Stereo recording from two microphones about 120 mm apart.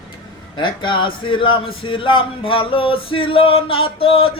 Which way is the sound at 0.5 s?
40° left (ahead or behind).